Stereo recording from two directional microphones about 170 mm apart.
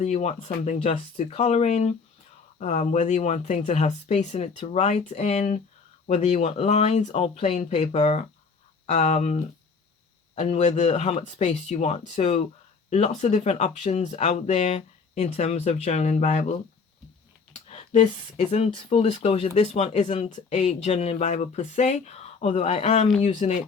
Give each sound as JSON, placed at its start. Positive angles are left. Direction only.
{"t": 0.0, "sound": "speech", "side_deg": 40}
{"t": 17.5, "sound": "speech", "side_deg": 40}